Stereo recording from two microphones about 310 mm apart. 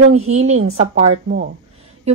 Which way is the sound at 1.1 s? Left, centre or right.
Right.